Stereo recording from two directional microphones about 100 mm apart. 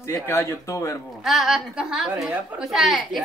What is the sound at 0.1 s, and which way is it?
Speech, 25° left (ahead or behind).